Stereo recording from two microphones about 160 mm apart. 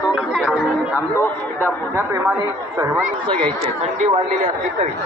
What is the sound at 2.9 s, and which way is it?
Speech, 5° left (ahead or behind).